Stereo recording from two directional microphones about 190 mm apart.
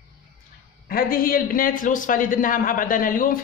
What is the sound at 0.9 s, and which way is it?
A man's voice, 50° left (ahead or behind).